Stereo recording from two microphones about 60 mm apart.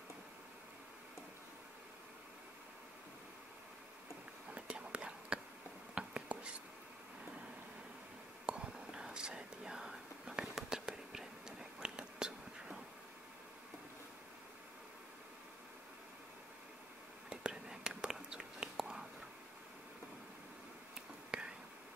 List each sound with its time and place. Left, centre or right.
4.5 s whispering: centre
8.5 s whispering: centre
17.3 s whispering: centre
21.3 s whispering: centre